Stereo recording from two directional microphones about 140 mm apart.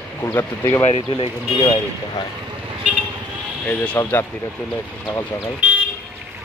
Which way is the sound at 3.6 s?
10° left (ahead or behind).